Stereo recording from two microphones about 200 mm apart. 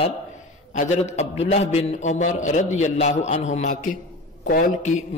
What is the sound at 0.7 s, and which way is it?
A man's voice, 35° left (ahead or behind).